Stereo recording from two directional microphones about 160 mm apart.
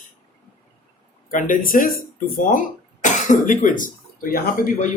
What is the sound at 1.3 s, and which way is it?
Speech, 55° left (ahead or behind).